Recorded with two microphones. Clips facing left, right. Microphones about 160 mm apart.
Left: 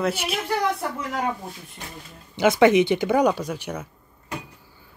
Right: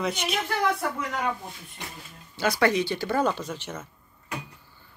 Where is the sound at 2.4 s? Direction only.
20° left (ahead or behind).